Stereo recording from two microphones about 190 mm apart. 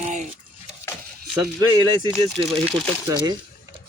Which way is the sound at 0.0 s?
40° right (ahead or behind).